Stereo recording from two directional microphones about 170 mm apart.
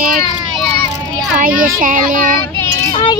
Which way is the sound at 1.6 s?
55° right (ahead or behind).